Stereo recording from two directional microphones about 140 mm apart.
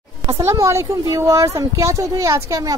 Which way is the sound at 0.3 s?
20° right (ahead or behind).